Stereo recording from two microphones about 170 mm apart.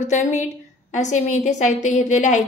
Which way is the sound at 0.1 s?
45° left (ahead or behind).